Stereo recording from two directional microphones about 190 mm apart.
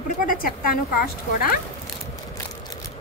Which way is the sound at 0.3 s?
50° left (ahead or behind).